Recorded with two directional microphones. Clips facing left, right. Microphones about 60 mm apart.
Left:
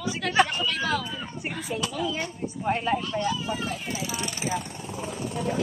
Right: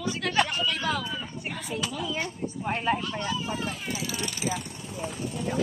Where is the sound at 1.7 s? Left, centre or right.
Centre.